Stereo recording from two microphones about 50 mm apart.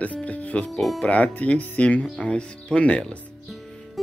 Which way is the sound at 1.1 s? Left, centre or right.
Left.